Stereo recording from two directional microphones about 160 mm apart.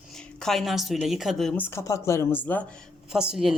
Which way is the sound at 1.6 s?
15° left (ahead or behind).